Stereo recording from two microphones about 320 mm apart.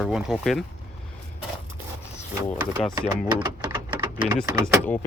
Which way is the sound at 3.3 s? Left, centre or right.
Centre.